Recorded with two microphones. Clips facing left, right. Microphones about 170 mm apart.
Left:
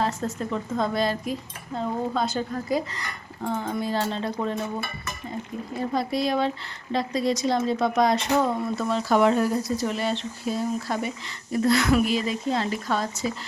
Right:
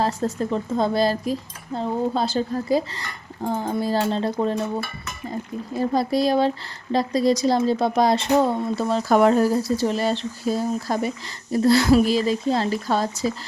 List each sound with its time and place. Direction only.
0.0 s speech: 35° right (ahead or behind)
5.8 s speech: 35° right (ahead or behind)